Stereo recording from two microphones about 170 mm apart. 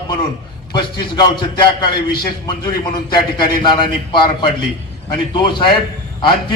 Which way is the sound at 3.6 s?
25° left (ahead or behind).